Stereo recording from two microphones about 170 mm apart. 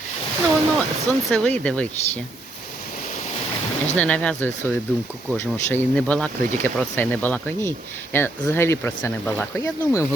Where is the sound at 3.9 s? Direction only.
10° left (ahead or behind).